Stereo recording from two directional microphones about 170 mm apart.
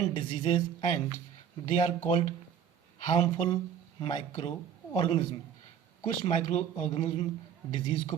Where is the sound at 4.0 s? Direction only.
25° left (ahead or behind).